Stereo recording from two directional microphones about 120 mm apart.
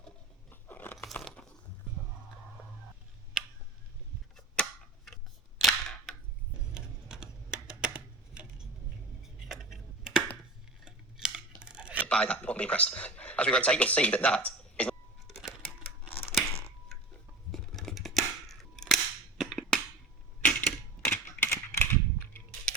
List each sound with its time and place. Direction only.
0.5 s crunch: 15° left (ahead or behind)
4.4 s tick-tock: 5° left (ahead or behind)
5.5 s cap gun: centre (ahead or behind)
6.7 s typing: 5° right (ahead or behind)
9.4 s a sound: 5° right (ahead or behind)
10.8 s scissors: 5° right (ahead or behind)
11.6 s a sound: 10° right (ahead or behind)
12.0 s speech: 10° left (ahead or behind)
16.5 s a sound: 55° left (ahead or behind)
17.5 s scissors: centre (ahead or behind)
19.4 s music: centre (ahead or behind)
20.4 s typewriter: 10° left (ahead or behind)